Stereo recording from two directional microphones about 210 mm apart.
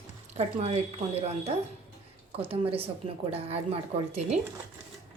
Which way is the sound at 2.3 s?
25° right (ahead or behind).